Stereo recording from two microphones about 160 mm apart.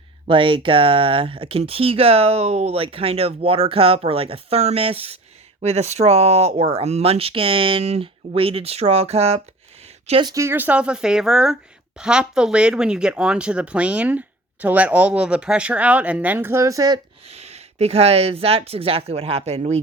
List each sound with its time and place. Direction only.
0.3 s speech: 30° right (ahead or behind)
10.3 s speech: 15° right (ahead or behind)
17.2 s speech: 40° right (ahead or behind)